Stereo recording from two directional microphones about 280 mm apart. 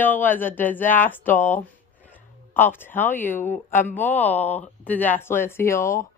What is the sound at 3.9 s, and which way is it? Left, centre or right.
Speech, centre.